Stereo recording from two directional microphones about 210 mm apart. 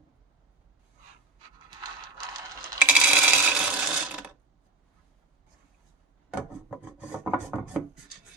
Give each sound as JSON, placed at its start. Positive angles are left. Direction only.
{"t": 1.5, "sound": "typing", "side_deg": -20}
{"t": 2.9, "sound": "a sound", "side_deg": -5}
{"t": 6.3, "sound": "wood", "side_deg": -5}